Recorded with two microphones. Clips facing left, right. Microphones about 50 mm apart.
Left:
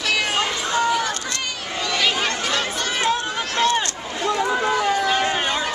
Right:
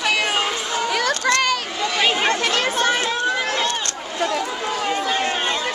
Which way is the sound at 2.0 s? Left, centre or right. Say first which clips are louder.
Right 4 dB; right.